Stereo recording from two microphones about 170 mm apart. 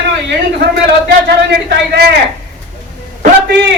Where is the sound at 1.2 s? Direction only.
75° right (ahead or behind).